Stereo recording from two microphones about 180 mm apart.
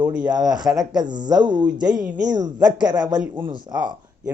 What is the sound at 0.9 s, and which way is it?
Speech, 25° right (ahead or behind).